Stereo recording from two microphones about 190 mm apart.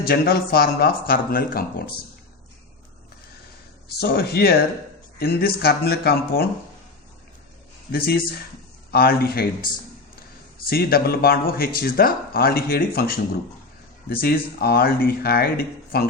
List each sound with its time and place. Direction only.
0.0 s speech: 55° left (ahead or behind)
3.8 s speech: 55° left (ahead or behind)
7.9 s speech: 55° left (ahead or behind)